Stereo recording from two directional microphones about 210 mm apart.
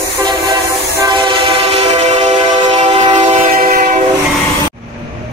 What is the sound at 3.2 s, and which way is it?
Train, 35° right (ahead or behind).